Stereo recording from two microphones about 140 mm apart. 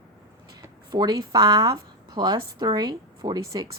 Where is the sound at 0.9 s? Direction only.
30° right (ahead or behind).